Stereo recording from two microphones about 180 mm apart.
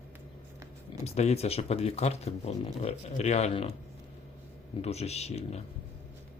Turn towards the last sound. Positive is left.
turn(degrees=35)  # may be behind; listen again after turning